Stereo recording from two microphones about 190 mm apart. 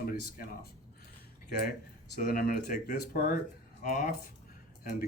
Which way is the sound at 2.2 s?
50° left (ahead or behind).